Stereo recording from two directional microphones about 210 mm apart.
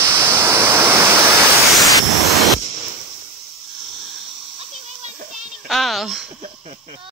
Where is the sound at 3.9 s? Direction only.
Centre (ahead or behind).